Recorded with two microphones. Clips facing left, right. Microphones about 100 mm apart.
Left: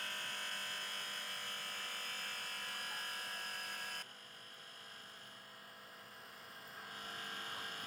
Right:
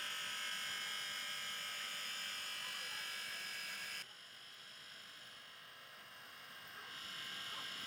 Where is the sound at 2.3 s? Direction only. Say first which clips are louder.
Left 3 dB; 55° left (ahead or behind).